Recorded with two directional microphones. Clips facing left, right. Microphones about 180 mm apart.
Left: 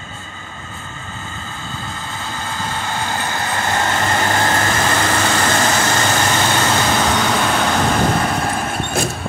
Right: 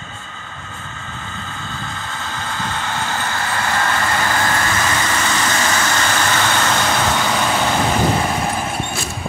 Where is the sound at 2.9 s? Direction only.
15° left (ahead or behind); by 5.7 s 45° left (ahead or behind).